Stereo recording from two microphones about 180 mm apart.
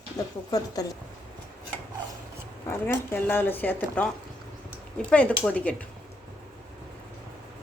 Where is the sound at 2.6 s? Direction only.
10° left (ahead or behind).